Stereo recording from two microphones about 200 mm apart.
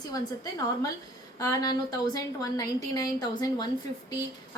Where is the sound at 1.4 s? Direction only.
15° left (ahead or behind).